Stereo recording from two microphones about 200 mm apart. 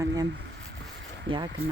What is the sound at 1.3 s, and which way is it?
Speech, 25° right (ahead or behind).